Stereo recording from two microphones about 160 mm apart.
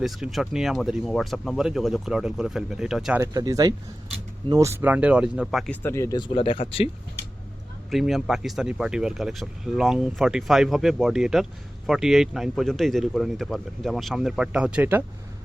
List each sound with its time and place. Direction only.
0.0 s speech: centre (ahead or behind)
3.2 s speech: 20° right (ahead or behind); by 5.7 s centre (ahead or behind)
5.8 s speech: 15° left (ahead or behind)
6.2 s speech: 35° left (ahead or behind)
7.9 s speech: centre (ahead or behind)